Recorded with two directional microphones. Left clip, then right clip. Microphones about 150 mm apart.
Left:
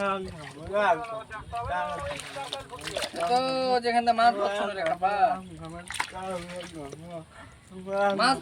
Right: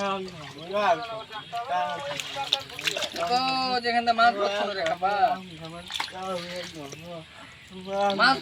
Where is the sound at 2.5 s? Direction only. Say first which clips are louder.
Right 7 dB; 30° left (ahead or behind).